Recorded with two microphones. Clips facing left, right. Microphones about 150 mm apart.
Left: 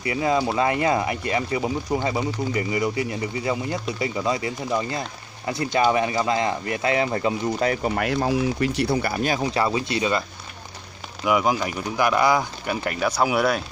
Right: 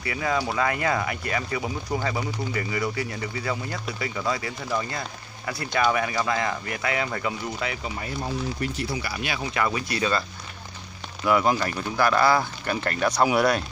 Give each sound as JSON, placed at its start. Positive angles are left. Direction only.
{"t": 0.0, "sound": "speech", "side_deg": 25}
{"t": 7.9, "sound": "speech", "side_deg": 80}
{"t": 11.2, "sound": "speech", "side_deg": 10}